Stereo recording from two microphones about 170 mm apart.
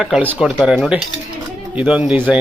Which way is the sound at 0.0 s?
5° right (ahead or behind).